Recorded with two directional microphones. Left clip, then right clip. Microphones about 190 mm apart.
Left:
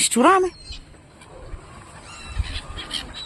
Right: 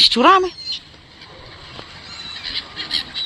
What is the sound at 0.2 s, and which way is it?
Speech, 10° left (ahead or behind).